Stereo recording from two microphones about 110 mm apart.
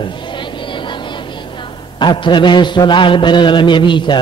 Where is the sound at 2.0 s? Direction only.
45° left (ahead or behind).